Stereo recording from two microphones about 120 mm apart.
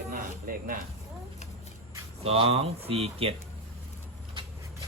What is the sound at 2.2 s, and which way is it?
Speech, 55° right (ahead or behind).